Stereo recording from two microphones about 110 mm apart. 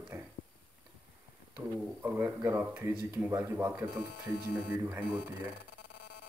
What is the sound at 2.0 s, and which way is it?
Speech, 20° right (ahead or behind).